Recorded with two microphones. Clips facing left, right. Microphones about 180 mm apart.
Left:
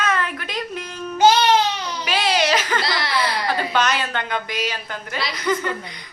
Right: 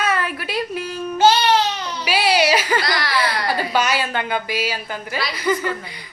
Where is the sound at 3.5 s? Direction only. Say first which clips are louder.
Even; 10° right (ahead or behind).